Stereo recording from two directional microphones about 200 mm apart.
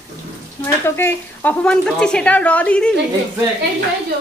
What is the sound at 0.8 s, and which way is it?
A woman's voice, 10° left (ahead or behind).